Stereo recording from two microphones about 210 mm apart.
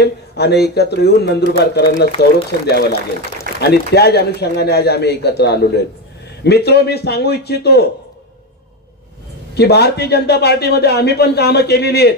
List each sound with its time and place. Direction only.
0.0 s a man's voice: 50° left (ahead or behind)
9.6 s a man's voice: 50° left (ahead or behind)